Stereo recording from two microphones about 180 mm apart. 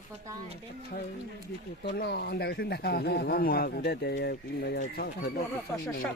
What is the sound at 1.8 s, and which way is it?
Speech, 65° left (ahead or behind).